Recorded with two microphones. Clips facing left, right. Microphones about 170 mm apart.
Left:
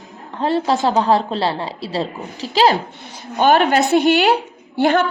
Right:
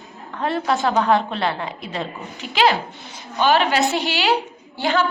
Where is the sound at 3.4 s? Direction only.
50° left (ahead or behind).